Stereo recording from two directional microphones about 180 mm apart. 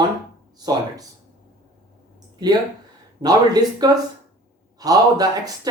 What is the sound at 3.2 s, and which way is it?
Speech, 20° right (ahead or behind).